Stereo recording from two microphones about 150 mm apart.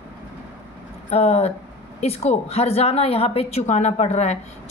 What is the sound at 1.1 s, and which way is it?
A man's voice, 45° left (ahead or behind).